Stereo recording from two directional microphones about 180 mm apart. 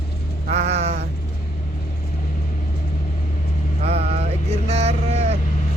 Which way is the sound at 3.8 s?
35° right (ahead or behind).